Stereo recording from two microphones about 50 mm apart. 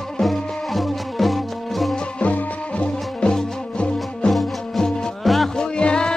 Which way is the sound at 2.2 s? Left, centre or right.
Left.